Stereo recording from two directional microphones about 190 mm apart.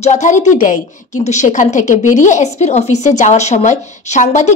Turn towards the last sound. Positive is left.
turn(degrees=40)  # may be behind; listen again after turning